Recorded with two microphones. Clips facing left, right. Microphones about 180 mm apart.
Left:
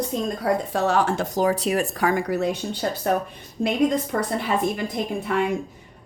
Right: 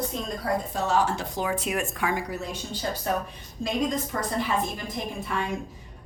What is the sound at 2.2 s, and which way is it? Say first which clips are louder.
A woman's voice: left 9 dB; 65° left (ahead or behind).